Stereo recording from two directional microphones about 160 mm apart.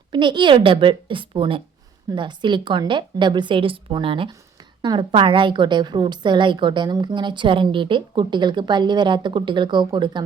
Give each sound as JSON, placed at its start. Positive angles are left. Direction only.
{"t": 0.1, "sound": "a woman's voice", "side_deg": -30}